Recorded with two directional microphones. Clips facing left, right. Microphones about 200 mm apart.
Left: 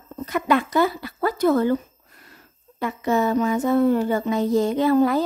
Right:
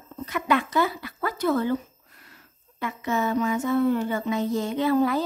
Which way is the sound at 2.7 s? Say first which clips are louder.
Left 5 dB; 35° left (ahead or behind).